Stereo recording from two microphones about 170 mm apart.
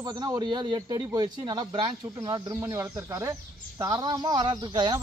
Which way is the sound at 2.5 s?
15° right (ahead or behind).